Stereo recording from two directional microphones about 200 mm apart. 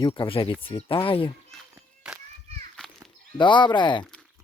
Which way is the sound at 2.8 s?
5° left (ahead or behind).